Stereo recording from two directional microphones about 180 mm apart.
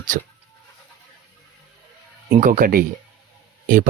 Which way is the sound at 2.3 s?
45° right (ahead or behind).